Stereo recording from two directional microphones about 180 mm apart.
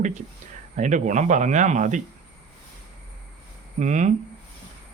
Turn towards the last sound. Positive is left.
turn(degrees=-40)  # may be behind; listen again after turning